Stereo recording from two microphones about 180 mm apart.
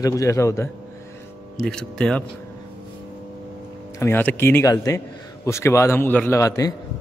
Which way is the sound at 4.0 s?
10° left (ahead or behind).